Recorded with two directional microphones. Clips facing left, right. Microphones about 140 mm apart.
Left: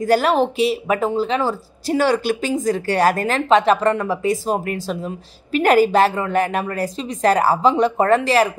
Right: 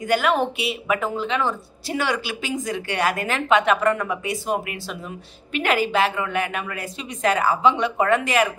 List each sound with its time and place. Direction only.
0.0 s speech: 35° left (ahead or behind)